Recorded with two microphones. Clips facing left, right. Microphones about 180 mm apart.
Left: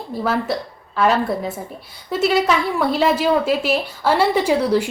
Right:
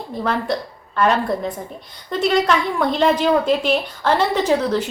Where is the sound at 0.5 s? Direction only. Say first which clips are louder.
Right 1 dB; 5° left (ahead or behind).